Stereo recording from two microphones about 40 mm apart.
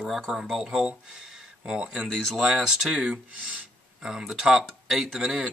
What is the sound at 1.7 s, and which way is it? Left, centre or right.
Speech, right.